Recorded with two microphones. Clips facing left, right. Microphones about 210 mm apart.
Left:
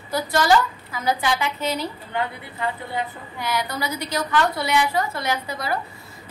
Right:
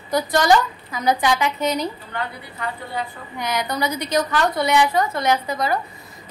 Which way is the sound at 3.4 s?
20° right (ahead or behind).